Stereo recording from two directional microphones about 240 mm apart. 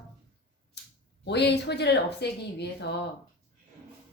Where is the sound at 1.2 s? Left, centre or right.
Left.